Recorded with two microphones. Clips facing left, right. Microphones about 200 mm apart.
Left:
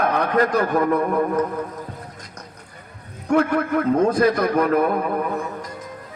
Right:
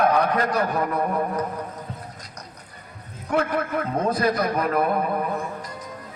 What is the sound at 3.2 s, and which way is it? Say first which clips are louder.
A man's voice: left 5 dB; 50° left (ahead or behind).